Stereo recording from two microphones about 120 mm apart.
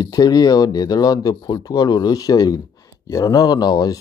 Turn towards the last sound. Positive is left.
turn(degrees=35)  # may be behind; listen again after turning